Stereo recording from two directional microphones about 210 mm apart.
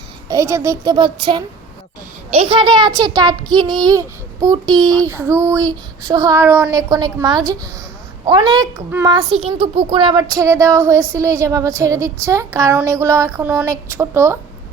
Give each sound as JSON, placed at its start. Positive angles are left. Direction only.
{"t": 0.3, "sound": "child singing", "side_deg": -15}
{"t": 2.3, "sound": "a child's voice", "side_deg": -25}
{"t": 5.0, "sound": "child singing", "side_deg": -10}
{"t": 8.2, "sound": "a child's voice", "side_deg": -20}
{"t": 9.5, "sound": "child singing", "side_deg": -25}